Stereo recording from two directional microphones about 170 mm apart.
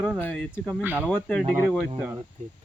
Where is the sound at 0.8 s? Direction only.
10° right (ahead or behind).